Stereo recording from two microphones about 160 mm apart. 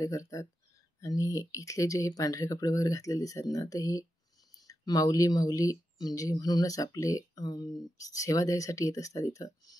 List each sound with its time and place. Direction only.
0.0 s speech: 20° left (ahead or behind)